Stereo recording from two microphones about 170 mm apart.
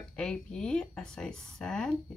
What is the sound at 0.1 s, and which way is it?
Speech, 5° left (ahead or behind).